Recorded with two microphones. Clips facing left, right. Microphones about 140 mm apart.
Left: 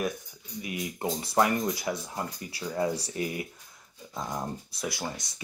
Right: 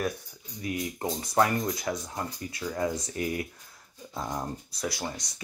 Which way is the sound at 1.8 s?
5° left (ahead or behind).